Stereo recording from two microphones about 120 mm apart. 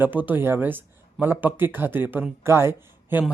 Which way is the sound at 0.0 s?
15° right (ahead or behind).